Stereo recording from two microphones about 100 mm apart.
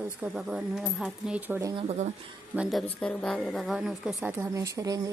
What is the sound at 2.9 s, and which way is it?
A woman's voice, 10° left (ahead or behind).